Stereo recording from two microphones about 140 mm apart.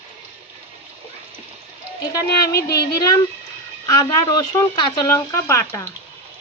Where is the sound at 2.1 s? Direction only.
25° left (ahead or behind).